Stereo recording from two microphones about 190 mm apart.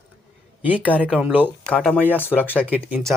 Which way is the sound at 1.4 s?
5° left (ahead or behind).